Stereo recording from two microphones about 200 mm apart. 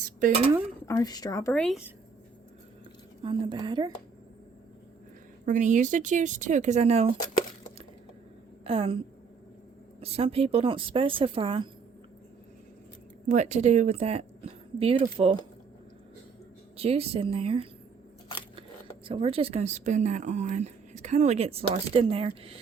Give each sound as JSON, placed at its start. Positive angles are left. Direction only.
{"t": 0.2, "sound": "speech", "side_deg": -40}
{"t": 0.9, "sound": "speech", "side_deg": 15}
{"t": 3.2, "sound": "speech", "side_deg": -25}
{"t": 5.5, "sound": "speech", "side_deg": -40}
{"t": 8.6, "sound": "speech", "side_deg": -30}
{"t": 10.0, "sound": "speech", "side_deg": -30}
{"t": 13.2, "sound": "speech", "side_deg": -35}
{"t": 16.7, "sound": "speech", "side_deg": -30}
{"t": 19.0, "sound": "speech", "side_deg": -25}